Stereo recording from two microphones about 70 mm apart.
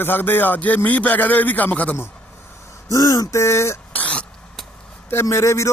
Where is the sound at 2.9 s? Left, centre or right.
Left.